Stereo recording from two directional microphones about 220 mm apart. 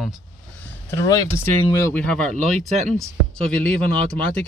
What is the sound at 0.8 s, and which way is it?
Speech, 15° left (ahead or behind).